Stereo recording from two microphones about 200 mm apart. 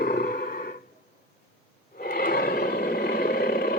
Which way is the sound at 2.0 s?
50° left (ahead or behind).